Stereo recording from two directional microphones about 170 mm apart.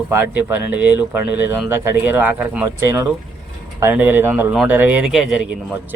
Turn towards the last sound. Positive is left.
turn(degrees=-5)  # may be behind; listen again after turning